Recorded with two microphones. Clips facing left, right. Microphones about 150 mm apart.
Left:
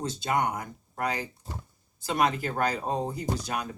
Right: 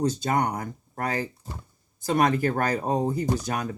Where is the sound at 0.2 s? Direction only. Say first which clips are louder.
Right 2 dB; 45° right (ahead or behind).